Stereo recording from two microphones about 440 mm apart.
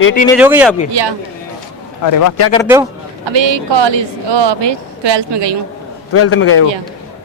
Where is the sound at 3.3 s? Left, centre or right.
Right.